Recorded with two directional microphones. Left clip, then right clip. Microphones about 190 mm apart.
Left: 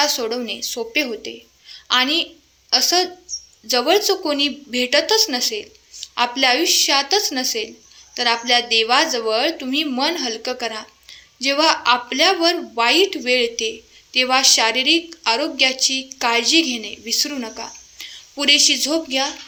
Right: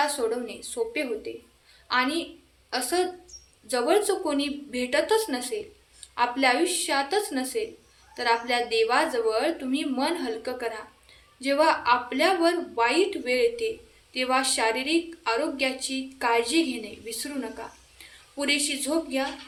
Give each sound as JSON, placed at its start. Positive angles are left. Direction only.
{"t": 0.0, "sound": "a woman's voice", "side_deg": 35}